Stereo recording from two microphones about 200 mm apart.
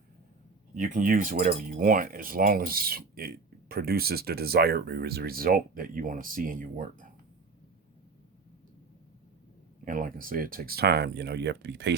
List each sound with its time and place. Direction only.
0.8 s speech: 40° right (ahead or behind)
9.8 s speech: 45° right (ahead or behind); by 11.9 s 60° right (ahead or behind)